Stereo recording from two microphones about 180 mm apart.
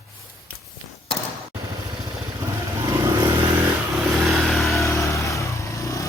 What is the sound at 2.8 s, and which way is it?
Vehicle, 20° right (ahead or behind).